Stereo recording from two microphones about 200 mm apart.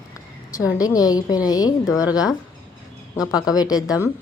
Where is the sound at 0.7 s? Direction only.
20° left (ahead or behind).